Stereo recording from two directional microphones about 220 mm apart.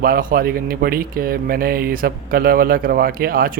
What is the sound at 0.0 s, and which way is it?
Speech, 40° right (ahead or behind).